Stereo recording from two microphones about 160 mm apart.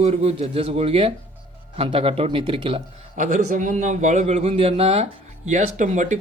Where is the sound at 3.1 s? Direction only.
55° right (ahead or behind).